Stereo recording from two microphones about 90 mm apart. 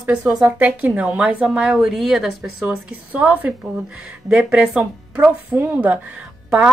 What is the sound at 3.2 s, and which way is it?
A woman's voice, 15° right (ahead or behind).